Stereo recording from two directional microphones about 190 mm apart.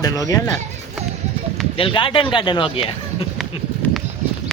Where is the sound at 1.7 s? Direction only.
25° left (ahead or behind).